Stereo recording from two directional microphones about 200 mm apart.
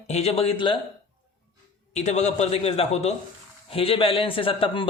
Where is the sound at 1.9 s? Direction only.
35° left (ahead or behind).